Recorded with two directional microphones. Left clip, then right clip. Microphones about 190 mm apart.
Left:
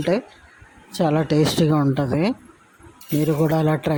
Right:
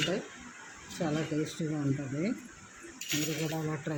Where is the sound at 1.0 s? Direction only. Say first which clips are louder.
Left 14 dB; 50° left (ahead or behind).